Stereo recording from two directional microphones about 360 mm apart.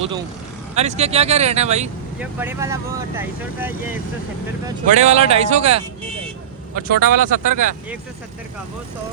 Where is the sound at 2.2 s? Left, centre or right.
Centre.